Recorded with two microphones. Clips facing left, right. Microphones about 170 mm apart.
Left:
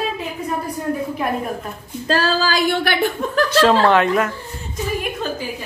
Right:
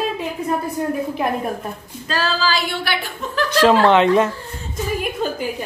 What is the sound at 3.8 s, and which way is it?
Speech, 20° right (ahead or behind).